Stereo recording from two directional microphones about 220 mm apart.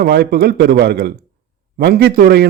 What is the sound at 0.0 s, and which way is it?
A man's voice, 45° right (ahead or behind).